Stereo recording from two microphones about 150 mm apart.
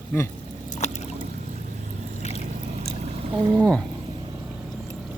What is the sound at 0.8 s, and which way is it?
Boat, 50° left (ahead or behind).